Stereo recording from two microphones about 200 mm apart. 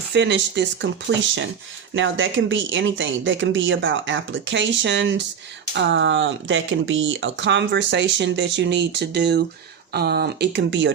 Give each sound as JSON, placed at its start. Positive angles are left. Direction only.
{"t": 0.1, "sound": "speech", "side_deg": -60}
{"t": 1.9, "sound": "speech", "side_deg": -70}